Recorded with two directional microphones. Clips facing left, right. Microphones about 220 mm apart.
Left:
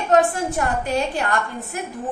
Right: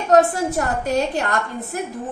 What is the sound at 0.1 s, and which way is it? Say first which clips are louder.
A woman's voice: right 2 dB; 40° right (ahead or behind).